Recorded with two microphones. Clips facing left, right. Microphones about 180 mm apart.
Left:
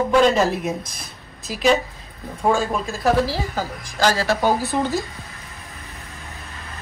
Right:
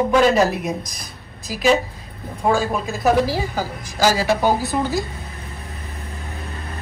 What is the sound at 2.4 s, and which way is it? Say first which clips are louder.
A woman's voice: right 1 dB; centre (ahead or behind).